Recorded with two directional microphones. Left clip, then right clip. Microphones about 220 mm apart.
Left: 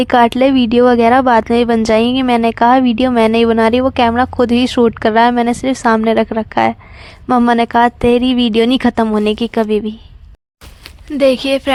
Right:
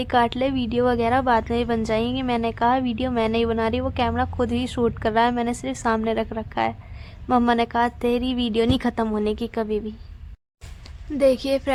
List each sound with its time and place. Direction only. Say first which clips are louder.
0.0 s a woman's voice: left 10 dB; 35° left (ahead or behind)
11.1 s speech: left 7 dB; 25° left (ahead or behind)